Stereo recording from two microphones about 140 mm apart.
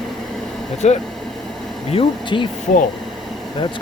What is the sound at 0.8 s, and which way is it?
Speech, 55° left (ahead or behind).